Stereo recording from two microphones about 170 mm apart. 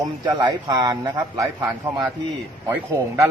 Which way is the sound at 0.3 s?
25° right (ahead or behind).